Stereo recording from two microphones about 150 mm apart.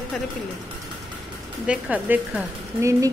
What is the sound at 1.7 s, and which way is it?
A woman's voice, 10° right (ahead or behind).